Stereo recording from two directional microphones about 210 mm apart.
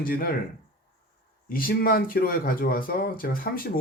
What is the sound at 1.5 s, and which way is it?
Speech, 45° left (ahead or behind).